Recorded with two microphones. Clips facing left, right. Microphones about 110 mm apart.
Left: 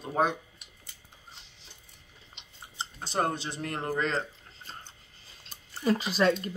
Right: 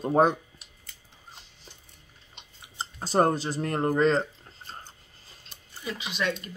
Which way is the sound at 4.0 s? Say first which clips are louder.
Right 7 dB; 35° right (ahead or behind).